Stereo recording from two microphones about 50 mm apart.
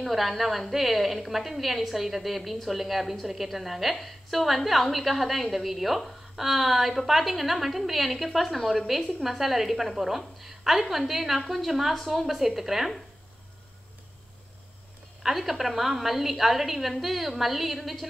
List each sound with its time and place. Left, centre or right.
0.0 s a woman's voice: centre
15.2 s a woman's voice: centre